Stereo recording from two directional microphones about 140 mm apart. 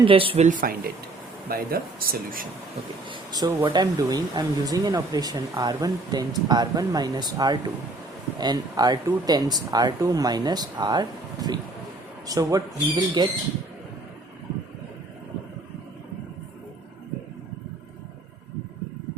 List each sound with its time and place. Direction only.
0.0 s speech: 40° right (ahead or behind)
0.4 s speech: 90° right
3.1 s speech: 30° right (ahead or behind)